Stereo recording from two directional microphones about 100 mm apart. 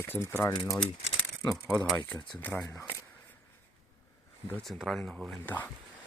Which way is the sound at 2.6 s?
25° left (ahead or behind).